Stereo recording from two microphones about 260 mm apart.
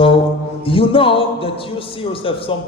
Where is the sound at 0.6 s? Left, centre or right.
Left.